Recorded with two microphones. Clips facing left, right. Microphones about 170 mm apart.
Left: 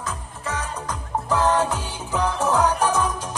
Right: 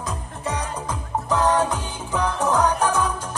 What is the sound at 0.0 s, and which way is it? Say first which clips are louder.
Music: right 2 dB; 15° right (ahead or behind).